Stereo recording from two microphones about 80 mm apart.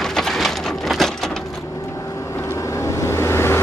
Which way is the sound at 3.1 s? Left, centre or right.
Left.